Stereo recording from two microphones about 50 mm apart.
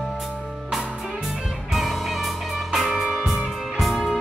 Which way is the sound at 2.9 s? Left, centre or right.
Centre.